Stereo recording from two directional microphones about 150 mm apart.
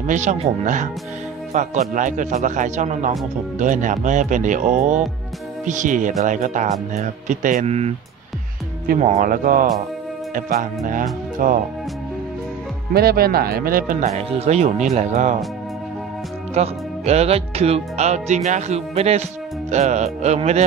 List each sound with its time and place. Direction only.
0.0 s speech: 55° right (ahead or behind)
8.8 s speech: 55° right (ahead or behind)
12.9 s speech: 90° right; by 14.0 s 70° right (ahead or behind)
14.0 s speech: 45° right (ahead or behind)
16.5 s speech: 45° right (ahead or behind)